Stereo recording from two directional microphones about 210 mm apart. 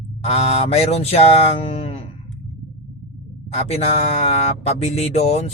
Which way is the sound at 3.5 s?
30° left (ahead or behind).